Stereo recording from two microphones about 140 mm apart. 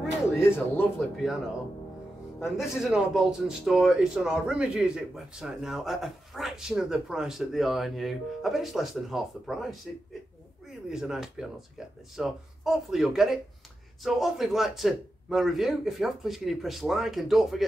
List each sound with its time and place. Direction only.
0.4 s speech: 15° left (ahead or behind)
2.4 s speech: 5° right (ahead or behind)
10.9 s speech: 5° right (ahead or behind)